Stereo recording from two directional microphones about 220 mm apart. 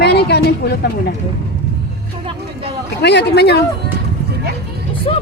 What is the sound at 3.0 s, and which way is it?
Speech, 50° left (ahead or behind).